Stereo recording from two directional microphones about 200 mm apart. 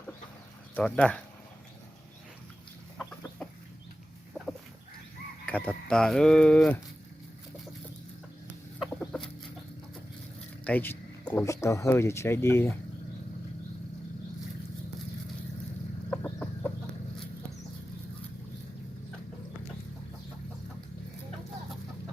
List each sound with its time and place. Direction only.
0.8 s speech: 5° left (ahead or behind)
3.0 s chicken: 5° left (ahead or behind)
5.5 s speech: 5° left (ahead or behind)
8.8 s chicken: 5° left (ahead or behind)
10.6 s speech: 10° left (ahead or behind)
16.0 s chicken: 10° left (ahead or behind)